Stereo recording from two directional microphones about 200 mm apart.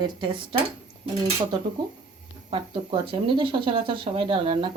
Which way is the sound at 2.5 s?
25° right (ahead or behind).